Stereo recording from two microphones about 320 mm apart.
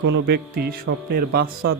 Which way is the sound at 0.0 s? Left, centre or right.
Right.